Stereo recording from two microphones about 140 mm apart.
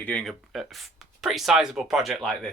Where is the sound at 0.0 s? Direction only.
10° left (ahead or behind).